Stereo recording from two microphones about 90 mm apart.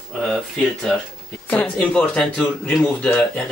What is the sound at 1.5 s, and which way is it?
Speech, 15° left (ahead or behind).